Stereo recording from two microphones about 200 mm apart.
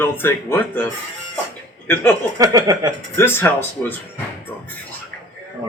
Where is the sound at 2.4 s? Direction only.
20° right (ahead or behind).